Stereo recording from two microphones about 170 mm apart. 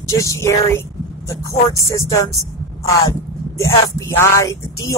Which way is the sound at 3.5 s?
15° left (ahead or behind).